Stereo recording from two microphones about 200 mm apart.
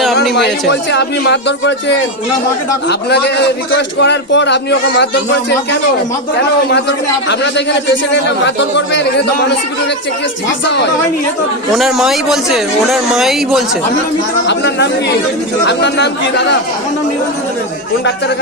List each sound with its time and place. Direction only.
0.0 s speech: centre (ahead or behind)
0.7 s a man's voice: 60° left (ahead or behind)
3.1 s a man's voice: 55° left (ahead or behind)
8.1 s a man's voice: 60° left (ahead or behind)
11.7 s speech: centre (ahead or behind)
14.4 s a man's voice: 60° left (ahead or behind)